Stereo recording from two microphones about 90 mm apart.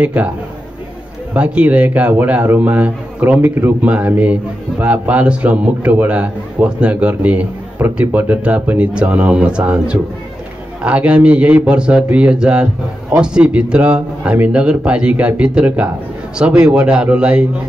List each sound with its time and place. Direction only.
0.0 s a man's voice: 15° right (ahead or behind)
1.3 s a man's voice: 15° right (ahead or behind)
10.8 s a man's voice: 15° right (ahead or behind)